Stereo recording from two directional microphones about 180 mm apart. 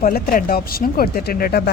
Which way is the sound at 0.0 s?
50° left (ahead or behind).